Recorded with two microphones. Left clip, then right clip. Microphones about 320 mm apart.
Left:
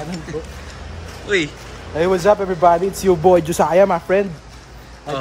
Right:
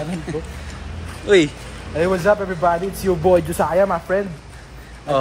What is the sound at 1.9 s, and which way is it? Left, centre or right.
Speech, left.